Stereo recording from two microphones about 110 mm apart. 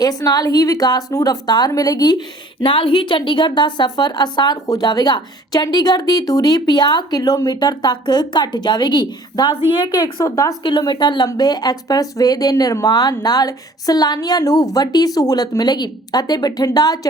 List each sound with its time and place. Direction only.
0.0 s a woman's voice: 35° left (ahead or behind)
10.6 s a woman's voice: 40° left (ahead or behind)